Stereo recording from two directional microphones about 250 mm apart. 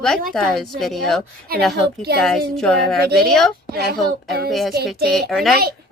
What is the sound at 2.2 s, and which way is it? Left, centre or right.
Speech, centre.